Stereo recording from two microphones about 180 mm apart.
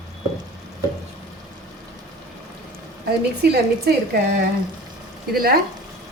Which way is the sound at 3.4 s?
60° right (ahead or behind).